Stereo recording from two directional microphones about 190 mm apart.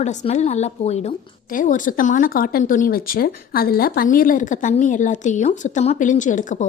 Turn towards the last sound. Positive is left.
turn(degrees=40)  # may be behind; listen again after turning